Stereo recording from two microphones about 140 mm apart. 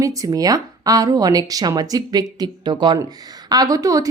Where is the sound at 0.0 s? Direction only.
25° right (ahead or behind).